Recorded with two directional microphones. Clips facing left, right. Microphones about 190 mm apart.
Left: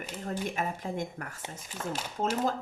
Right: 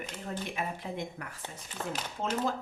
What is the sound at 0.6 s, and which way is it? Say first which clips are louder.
Speech: left 3 dB; 45° left (ahead or behind).